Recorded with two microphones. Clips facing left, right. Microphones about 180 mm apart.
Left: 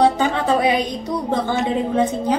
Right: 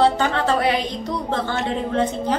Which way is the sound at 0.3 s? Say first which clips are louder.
Left 2 dB; 15° left (ahead or behind).